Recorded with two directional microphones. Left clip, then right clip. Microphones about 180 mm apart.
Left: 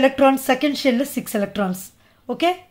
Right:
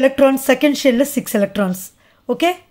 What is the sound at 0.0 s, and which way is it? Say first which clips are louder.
Speech: right 3 dB; 25° right (ahead or behind).